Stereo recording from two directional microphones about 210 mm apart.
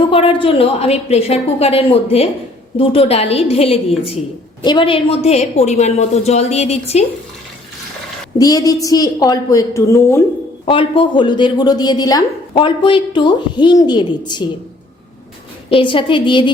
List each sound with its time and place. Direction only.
0.1 s a woman's voice: 25° left (ahead or behind)
8.4 s a woman's voice: 15° left (ahead or behind)
10.7 s a woman's voice: 25° left (ahead or behind)
15.7 s a woman's voice: 25° left (ahead or behind)